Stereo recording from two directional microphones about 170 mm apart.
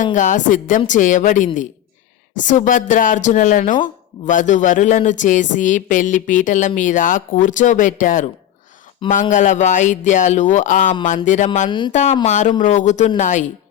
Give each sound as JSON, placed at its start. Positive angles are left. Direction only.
{"t": 0.0, "sound": "speech", "side_deg": 50}
{"t": 9.3, "sound": "speech", "side_deg": 45}